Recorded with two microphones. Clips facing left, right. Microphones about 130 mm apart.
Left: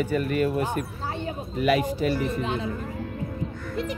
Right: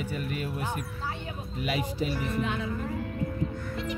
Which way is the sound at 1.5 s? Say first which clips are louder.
Left 9 dB; 55° left (ahead or behind).